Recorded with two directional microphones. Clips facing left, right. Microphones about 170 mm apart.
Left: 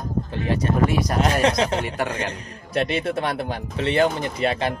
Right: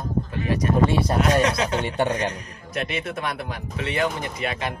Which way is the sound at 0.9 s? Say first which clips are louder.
Right 1 dB; 30° right (ahead or behind).